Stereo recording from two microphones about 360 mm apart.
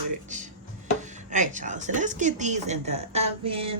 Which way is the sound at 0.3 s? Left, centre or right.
Centre.